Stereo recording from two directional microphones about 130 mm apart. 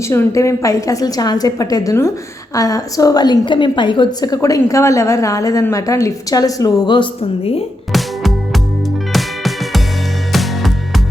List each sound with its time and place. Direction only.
0.1 s a woman's voice: 25° left (ahead or behind); by 7.6 s 50° left (ahead or behind)
7.9 s music: centre (ahead or behind)